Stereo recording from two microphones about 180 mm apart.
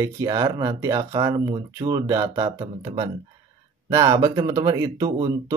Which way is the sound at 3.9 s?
20° right (ahead or behind).